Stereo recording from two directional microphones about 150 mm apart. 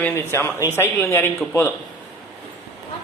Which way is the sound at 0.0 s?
15° left (ahead or behind).